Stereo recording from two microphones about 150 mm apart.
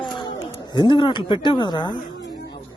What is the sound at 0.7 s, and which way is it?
Speech, 30° left (ahead or behind).